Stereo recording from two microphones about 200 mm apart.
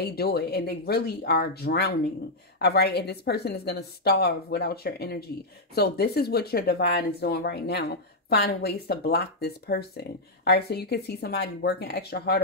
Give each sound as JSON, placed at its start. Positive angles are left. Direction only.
{"t": 0.0, "sound": "speech", "side_deg": 50}